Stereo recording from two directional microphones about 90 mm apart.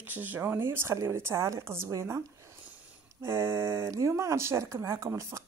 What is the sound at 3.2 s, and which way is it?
Speech, 25° right (ahead or behind).